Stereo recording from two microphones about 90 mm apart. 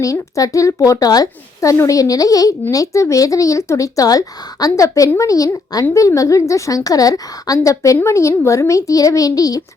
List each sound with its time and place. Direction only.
0.0 s a woman's voice: 40° left (ahead or behind)
1.7 s speech: 30° left (ahead or behind)
2.0 s a woman's voice: 40° left (ahead or behind)